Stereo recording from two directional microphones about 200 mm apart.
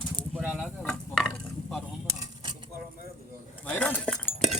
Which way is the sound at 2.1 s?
20° right (ahead or behind).